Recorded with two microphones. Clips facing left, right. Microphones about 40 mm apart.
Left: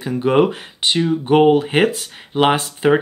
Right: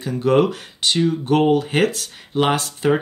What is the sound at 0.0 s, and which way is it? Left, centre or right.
Speech, left.